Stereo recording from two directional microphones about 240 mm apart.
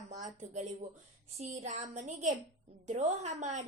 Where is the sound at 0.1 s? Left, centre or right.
Right.